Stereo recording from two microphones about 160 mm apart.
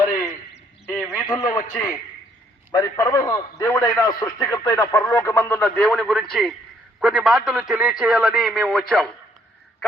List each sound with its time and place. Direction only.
0.1 s a sound: 20° left (ahead or behind)
1.2 s a man's voice: 25° left (ahead or behind)
2.7 s a man's voice: 20° left (ahead or behind); by 9.0 s centre (ahead or behind)